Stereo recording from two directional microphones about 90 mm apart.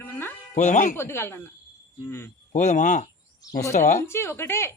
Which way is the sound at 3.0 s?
45° left (ahead or behind).